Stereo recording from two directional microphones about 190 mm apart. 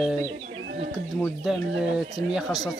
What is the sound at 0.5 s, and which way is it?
Bird, 65° right (ahead or behind).